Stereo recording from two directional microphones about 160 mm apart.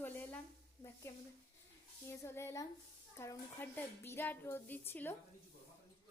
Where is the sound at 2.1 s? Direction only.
15° left (ahead or behind).